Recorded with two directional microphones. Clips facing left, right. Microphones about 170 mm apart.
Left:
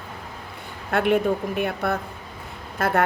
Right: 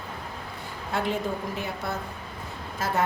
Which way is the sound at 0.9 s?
60° left (ahead or behind).